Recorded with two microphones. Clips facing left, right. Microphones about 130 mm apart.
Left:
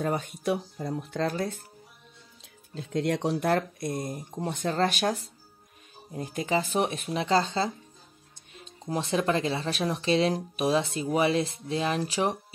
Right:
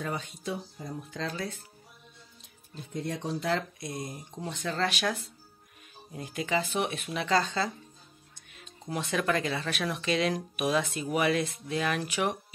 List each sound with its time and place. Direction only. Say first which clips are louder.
0.0 s speech: left 6 dB; 45° left (ahead or behind)
0.4 s speech: left 7 dB; 65° left (ahead or behind); by 1.6 s 45° left (ahead or behind)
2.8 s speech: left 7 dB; 90° left; by 3.4 s 75° left (ahead or behind)
3.4 s speech: left 5 dB; 50° left (ahead or behind); by 12.5 s 35° left (ahead or behind)